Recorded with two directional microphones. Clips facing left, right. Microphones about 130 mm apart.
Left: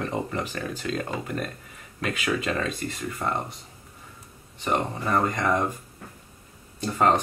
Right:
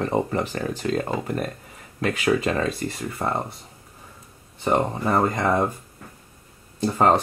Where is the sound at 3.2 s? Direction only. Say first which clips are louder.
Right 3 dB; 45° right (ahead or behind).